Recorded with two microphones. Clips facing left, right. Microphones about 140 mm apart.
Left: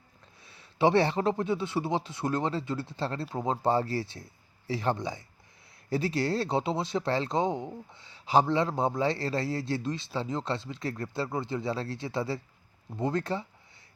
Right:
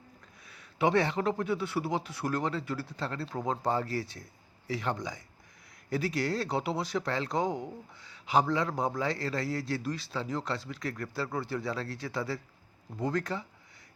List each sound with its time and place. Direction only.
0.4 s speech: 30° left (ahead or behind)